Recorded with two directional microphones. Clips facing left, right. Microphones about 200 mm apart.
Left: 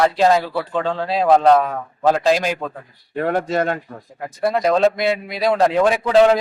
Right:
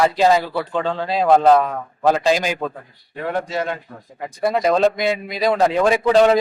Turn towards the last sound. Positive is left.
turn(degrees=0)  # may be behind; listen again after turning